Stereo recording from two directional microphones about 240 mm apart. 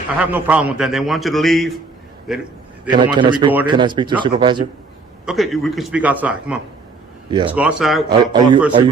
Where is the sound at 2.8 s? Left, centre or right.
Centre.